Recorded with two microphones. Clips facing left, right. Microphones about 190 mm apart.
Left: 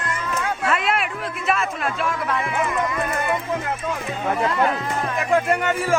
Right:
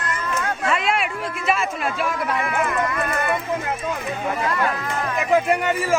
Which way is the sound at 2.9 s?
15° left (ahead or behind).